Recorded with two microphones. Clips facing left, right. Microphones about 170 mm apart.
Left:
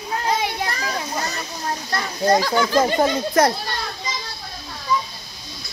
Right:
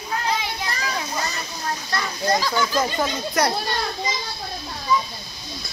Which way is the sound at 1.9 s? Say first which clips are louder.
Left 5 dB; 35° left (ahead or behind).